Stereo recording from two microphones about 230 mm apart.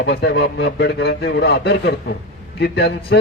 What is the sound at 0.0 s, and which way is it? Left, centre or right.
A man's voice, left.